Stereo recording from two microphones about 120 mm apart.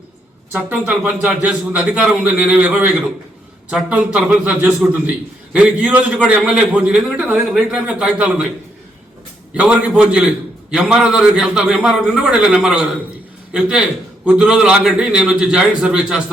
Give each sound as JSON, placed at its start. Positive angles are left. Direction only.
{"t": 0.5, "sound": "a man's voice", "side_deg": -15}
{"t": 9.6, "sound": "a man's voice", "side_deg": -10}